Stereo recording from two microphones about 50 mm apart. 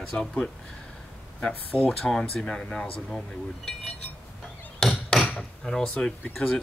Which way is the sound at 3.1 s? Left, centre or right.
Centre.